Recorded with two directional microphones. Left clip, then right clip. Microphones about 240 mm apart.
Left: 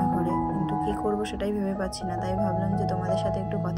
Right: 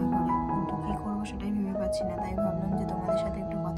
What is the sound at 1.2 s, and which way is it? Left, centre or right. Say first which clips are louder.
Speech: left 7 dB; centre.